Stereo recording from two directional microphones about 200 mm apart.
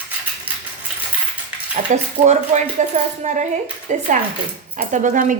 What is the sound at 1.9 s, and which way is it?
A woman's voice, 40° right (ahead or behind).